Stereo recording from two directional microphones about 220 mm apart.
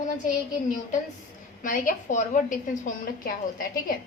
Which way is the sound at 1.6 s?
35° left (ahead or behind).